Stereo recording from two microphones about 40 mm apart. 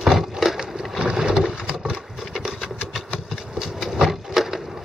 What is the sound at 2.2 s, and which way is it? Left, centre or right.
Sewing machine, centre.